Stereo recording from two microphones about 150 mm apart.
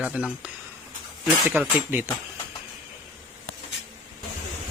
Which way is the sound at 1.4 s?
10° right (ahead or behind).